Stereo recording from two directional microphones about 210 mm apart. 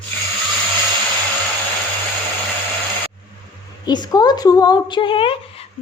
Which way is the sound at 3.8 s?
20° left (ahead or behind).